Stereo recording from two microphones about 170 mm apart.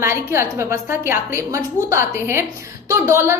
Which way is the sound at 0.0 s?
15° right (ahead or behind).